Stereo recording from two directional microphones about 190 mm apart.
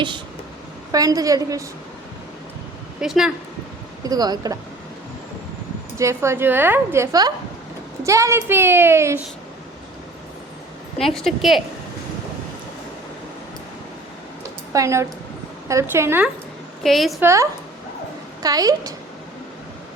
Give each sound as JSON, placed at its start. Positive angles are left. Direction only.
{"t": 0.9, "sound": "a woman's voice", "side_deg": -20}
{"t": 3.0, "sound": "a woman's voice", "side_deg": -5}
{"t": 4.0, "sound": "speech", "side_deg": -20}
{"t": 6.0, "sound": "a woman's voice", "side_deg": -15}
{"t": 10.9, "sound": "a woman's voice", "side_deg": 5}
{"t": 14.7, "sound": "a woman's voice", "side_deg": -15}
{"t": 16.8, "sound": "a woman's voice", "side_deg": 0}
{"t": 17.2, "sound": "a woman's voice", "side_deg": -15}